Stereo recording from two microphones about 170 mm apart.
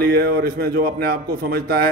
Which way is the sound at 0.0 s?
65° right (ahead or behind).